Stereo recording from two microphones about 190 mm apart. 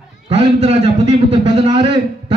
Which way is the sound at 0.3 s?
35° right (ahead or behind).